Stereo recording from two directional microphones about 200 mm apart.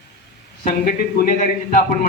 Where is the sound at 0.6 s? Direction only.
50° left (ahead or behind).